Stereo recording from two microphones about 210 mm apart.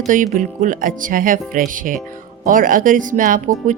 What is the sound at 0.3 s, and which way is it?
Speech, 40° right (ahead or behind).